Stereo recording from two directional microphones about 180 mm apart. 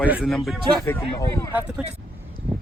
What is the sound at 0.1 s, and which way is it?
Speech, centre (ahead or behind).